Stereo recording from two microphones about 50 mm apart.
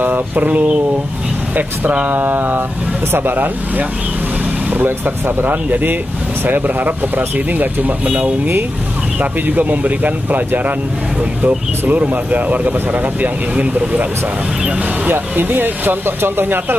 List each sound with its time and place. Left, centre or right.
0.0 s speech: right
1.9 s speech: right
5.4 s speech: right
15.0 s speech: right